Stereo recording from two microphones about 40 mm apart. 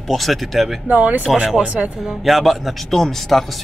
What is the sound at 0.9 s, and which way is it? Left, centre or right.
Speech, right.